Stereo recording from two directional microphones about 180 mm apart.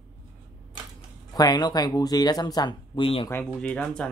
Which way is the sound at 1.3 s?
20° left (ahead or behind).